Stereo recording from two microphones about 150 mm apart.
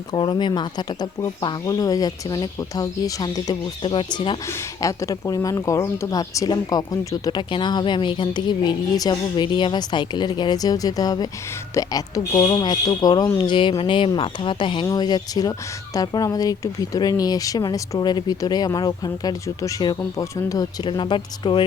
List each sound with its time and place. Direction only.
0.1 s speech: 30° left (ahead or behind)
4.4 s speech: 20° left (ahead or behind)